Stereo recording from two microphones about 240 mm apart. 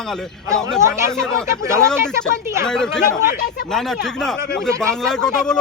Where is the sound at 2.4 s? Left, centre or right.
Centre.